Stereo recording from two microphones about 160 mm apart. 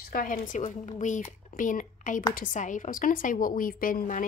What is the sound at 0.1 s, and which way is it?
A woman's voice, 60° left (ahead or behind).